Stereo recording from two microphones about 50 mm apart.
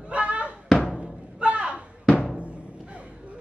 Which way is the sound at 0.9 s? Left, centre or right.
Right.